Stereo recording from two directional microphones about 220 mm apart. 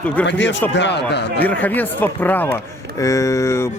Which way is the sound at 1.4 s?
5° left (ahead or behind).